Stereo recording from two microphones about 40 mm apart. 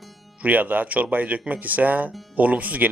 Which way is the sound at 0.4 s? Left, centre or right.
Right.